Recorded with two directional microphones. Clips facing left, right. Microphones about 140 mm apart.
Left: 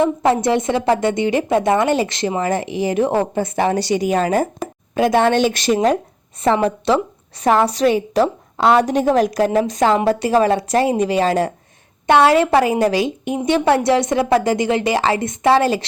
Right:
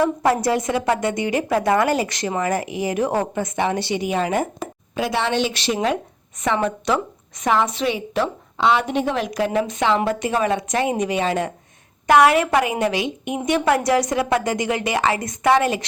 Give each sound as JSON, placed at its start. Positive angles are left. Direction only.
{"t": 0.0, "sound": "a woman's voice", "side_deg": 25}
{"t": 4.9, "sound": "a woman's voice", "side_deg": 50}